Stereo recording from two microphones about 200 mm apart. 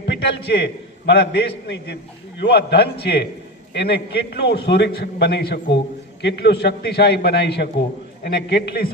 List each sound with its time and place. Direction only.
0.1 s a man's voice: 55° left (ahead or behind)